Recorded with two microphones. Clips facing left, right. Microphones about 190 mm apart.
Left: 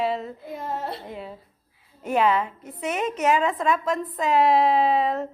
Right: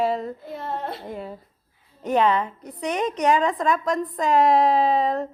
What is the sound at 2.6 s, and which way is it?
Speech, 40° right (ahead or behind).